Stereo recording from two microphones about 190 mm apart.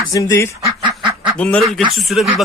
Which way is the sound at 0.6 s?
20° right (ahead or behind).